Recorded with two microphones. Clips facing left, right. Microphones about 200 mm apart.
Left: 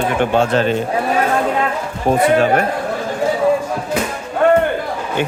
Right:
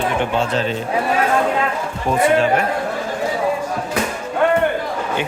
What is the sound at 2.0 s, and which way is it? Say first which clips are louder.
Speech: left 2 dB; 40° left (ahead or behind).